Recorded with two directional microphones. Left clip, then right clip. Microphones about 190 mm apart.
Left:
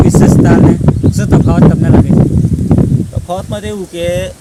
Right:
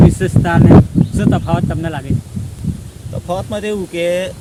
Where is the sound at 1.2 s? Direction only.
50° left (ahead or behind).